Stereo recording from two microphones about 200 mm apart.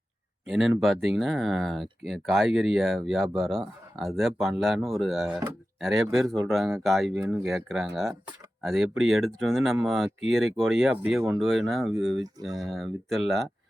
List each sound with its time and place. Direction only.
0.4 s speech: centre (ahead or behind)
11.9 s speech: 70° right (ahead or behind)
12.1 s speech: centre (ahead or behind)